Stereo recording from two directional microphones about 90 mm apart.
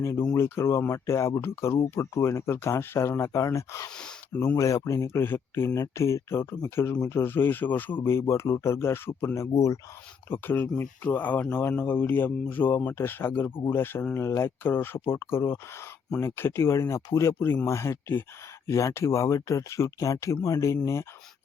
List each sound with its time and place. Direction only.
0.3 s speech: 30° left (ahead or behind)
10.2 s speech: 25° left (ahead or behind)